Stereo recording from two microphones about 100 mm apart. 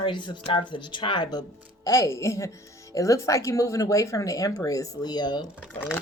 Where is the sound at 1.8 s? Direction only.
30° left (ahead or behind).